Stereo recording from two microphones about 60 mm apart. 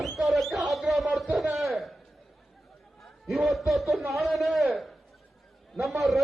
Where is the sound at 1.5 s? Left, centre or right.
Centre.